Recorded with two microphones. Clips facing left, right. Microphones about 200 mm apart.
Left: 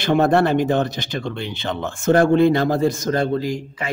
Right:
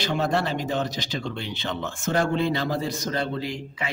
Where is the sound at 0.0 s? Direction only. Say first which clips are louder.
Left 9 dB; 55° left (ahead or behind).